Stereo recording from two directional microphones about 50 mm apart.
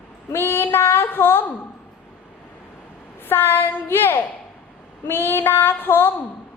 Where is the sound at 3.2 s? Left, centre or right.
Left.